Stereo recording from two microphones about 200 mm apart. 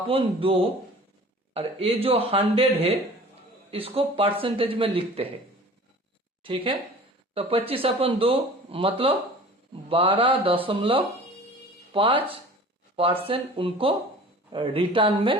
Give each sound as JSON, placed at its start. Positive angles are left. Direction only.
{"t": 0.1, "sound": "speech", "side_deg": -25}
{"t": 6.4, "sound": "speech", "side_deg": -25}